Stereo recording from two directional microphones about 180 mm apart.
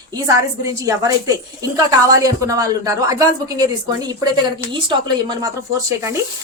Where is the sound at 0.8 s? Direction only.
20° right (ahead or behind).